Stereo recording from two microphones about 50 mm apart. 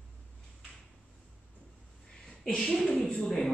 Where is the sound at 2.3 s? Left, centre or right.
Centre.